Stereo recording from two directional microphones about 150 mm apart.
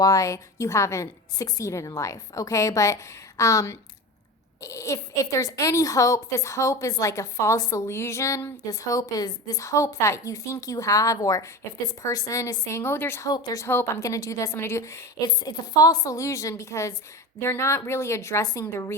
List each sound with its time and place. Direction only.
0.0 s a woman's voice: 20° left (ahead or behind)